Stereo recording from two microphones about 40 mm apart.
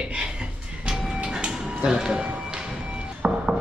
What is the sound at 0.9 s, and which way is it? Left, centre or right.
Music, centre.